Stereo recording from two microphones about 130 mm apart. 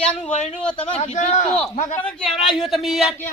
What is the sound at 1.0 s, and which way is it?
Speech, 65° left (ahead or behind).